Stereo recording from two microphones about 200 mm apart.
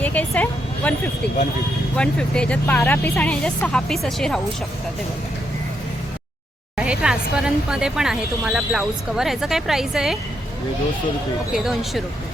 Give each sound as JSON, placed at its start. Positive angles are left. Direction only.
{"t": 0.0, "sound": "a woman's voice", "side_deg": 5}
{"t": 6.7, "sound": "speech", "side_deg": -5}
{"t": 11.5, "sound": "speech", "side_deg": 0}